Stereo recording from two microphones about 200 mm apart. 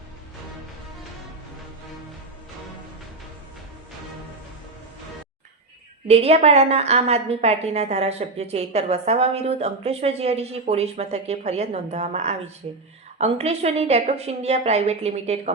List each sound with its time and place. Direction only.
6.1 s a woman's voice: 30° right (ahead or behind)